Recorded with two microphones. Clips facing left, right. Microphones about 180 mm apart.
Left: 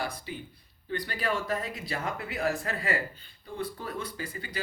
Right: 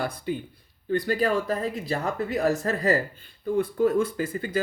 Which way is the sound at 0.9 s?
45° right (ahead or behind).